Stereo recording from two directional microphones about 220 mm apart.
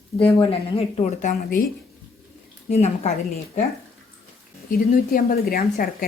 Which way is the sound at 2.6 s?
30° left (ahead or behind).